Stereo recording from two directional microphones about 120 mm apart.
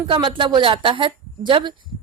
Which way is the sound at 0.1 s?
45° right (ahead or behind).